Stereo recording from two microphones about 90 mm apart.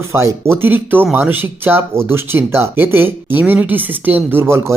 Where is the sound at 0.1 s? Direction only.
30° right (ahead or behind).